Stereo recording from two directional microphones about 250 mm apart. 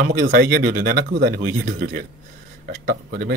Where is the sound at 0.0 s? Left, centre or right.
Right.